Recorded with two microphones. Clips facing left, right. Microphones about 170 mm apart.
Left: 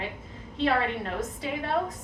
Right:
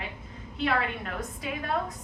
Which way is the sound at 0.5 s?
30° left (ahead or behind).